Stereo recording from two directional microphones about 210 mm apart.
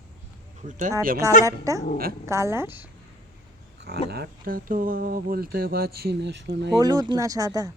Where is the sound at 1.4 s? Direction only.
15° right (ahead or behind).